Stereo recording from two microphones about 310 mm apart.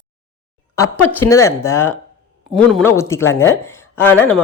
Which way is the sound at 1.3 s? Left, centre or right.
Centre.